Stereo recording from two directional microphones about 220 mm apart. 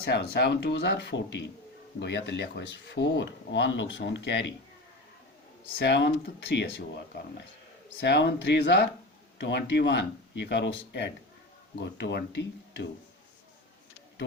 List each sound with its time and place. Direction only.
0.0 s speech: 50° left (ahead or behind)
5.8 s speech: 50° left (ahead or behind)
7.9 s speech: 50° left (ahead or behind)